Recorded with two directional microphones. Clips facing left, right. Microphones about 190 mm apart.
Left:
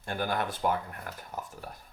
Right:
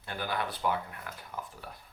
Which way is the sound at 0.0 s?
45° left (ahead or behind).